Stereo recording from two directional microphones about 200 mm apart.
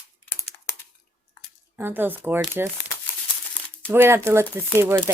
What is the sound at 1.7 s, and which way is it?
Speech, 10° right (ahead or behind).